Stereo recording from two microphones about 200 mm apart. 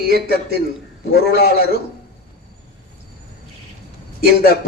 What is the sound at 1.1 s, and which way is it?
Speech, 50° left (ahead or behind).